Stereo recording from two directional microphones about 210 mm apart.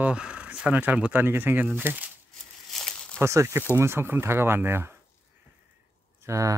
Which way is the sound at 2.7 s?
Centre (ahead or behind).